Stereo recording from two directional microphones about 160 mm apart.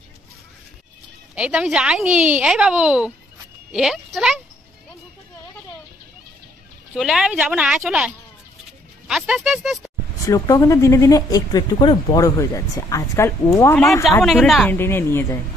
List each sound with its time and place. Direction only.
1.3 s speech: 5° right (ahead or behind)
7.0 s speech: 5° right (ahead or behind)
10.2 s speech: 20° left (ahead or behind)
14.2 s speech: centre (ahead or behind)
14.7 s speech: 15° left (ahead or behind)